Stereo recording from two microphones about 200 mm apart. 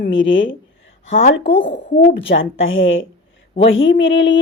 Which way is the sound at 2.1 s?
70° left (ahead or behind).